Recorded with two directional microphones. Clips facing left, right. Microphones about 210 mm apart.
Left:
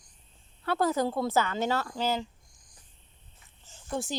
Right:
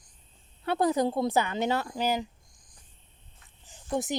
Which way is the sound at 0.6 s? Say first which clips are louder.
Right 2 dB; 20° right (ahead or behind).